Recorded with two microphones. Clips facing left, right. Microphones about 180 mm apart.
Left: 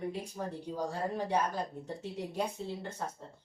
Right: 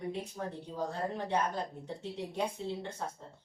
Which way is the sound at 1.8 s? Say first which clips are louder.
Even; 10° left (ahead or behind).